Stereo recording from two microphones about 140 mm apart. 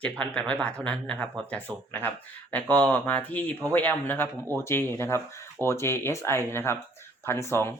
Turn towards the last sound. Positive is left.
turn(degrees=20)  # may be behind; listen again after turning